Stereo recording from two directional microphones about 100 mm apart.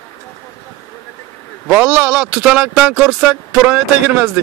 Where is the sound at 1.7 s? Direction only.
20° right (ahead or behind).